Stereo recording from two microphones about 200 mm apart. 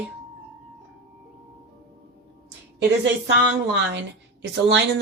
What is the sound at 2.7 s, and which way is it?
Speech, 60° right (ahead or behind).